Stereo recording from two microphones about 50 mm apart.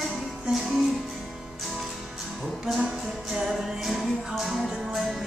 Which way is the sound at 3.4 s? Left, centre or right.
Centre.